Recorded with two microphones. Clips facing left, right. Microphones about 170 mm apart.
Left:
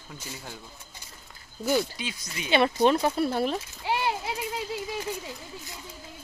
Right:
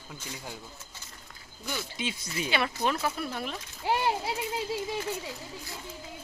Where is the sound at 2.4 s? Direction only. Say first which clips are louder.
Left 8 dB; 25° left (ahead or behind).